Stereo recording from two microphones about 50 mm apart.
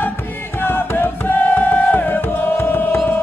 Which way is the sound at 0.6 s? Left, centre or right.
Left.